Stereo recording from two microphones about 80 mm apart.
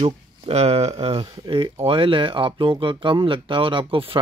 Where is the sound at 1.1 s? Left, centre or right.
Right.